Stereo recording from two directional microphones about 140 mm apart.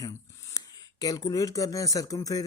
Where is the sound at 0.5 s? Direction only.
25° left (ahead or behind).